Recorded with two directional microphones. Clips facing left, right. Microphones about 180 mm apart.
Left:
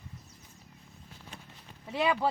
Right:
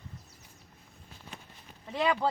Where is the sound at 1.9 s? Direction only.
10° left (ahead or behind).